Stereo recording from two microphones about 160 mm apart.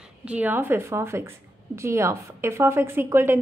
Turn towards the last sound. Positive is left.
turn(degrees=-15)  # may be behind; listen again after turning